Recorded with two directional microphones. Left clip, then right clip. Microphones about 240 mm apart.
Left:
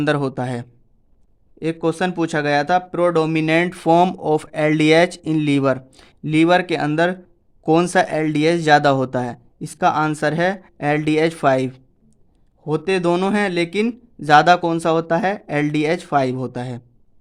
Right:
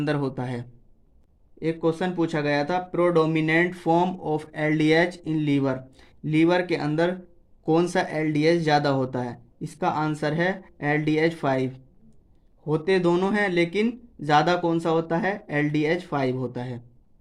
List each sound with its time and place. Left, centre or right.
0.0 s speech: left